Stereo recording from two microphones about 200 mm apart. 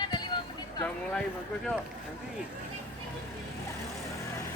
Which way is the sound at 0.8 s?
5° left (ahead or behind).